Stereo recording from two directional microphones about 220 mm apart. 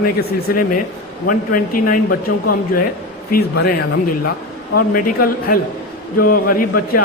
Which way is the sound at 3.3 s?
45° left (ahead or behind).